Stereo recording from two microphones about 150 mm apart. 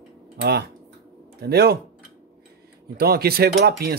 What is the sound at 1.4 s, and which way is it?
Speech, 90° right.